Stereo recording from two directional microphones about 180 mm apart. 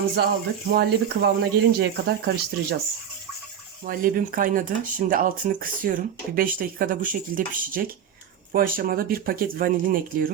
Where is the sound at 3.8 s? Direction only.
50° right (ahead or behind).